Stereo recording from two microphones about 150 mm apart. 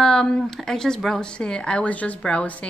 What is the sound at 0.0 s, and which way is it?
A woman's voice, 5° left (ahead or behind).